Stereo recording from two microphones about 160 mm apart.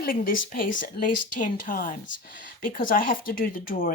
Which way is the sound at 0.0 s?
60° left (ahead or behind).